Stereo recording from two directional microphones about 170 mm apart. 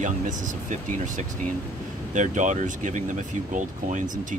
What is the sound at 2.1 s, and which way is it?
Speech, 45° right (ahead or behind).